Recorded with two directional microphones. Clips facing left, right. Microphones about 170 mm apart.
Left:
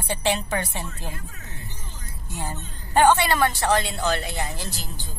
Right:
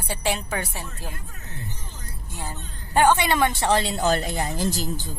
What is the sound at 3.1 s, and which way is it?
Speech, 15° right (ahead or behind).